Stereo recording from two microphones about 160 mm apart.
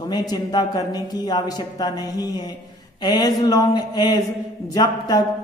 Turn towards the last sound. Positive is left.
turn(degrees=25)  # may be behind; listen again after turning